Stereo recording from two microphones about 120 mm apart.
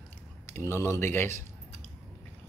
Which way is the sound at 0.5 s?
20° left (ahead or behind).